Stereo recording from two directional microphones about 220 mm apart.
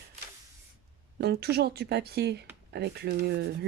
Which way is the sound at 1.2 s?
45° right (ahead or behind).